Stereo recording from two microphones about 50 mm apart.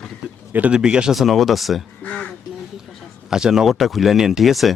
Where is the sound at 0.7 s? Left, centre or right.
Centre.